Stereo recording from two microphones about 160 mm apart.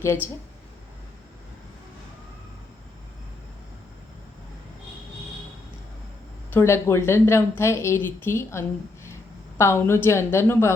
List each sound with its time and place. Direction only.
0.0 s a woman's voice: 15° left (ahead or behind)
6.5 s a woman's voice: 15° left (ahead or behind)